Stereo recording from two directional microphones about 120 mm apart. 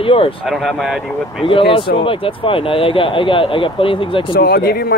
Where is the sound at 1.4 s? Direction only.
45° left (ahead or behind).